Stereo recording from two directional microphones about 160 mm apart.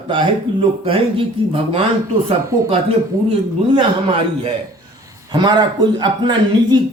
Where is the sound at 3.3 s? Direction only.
30° right (ahead or behind).